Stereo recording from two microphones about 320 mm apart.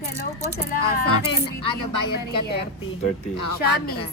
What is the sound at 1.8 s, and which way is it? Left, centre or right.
Speech, left.